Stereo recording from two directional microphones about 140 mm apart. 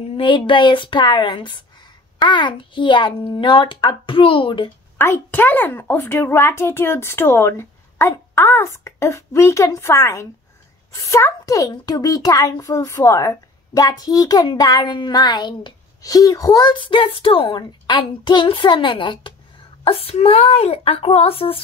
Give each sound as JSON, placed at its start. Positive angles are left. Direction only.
{"t": 0.0, "sound": "a child's voice", "side_deg": 40}
{"t": 4.9, "sound": "a woman's voice", "side_deg": 15}